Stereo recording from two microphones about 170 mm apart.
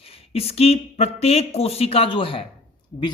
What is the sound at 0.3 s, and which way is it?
Speech, 35° left (ahead or behind).